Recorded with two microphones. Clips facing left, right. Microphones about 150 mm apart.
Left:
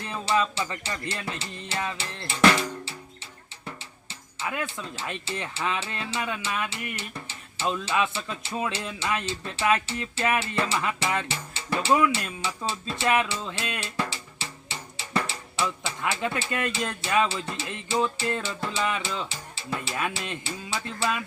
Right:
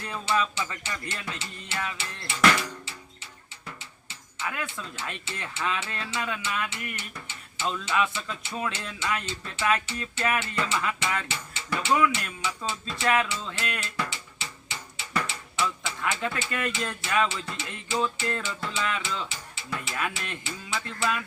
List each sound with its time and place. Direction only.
0.0 s music: 25° left (ahead or behind)
4.4 s speech: 30° left (ahead or behind)
13.4 s music: 20° left (ahead or behind)
20.7 s speech: 25° left (ahead or behind)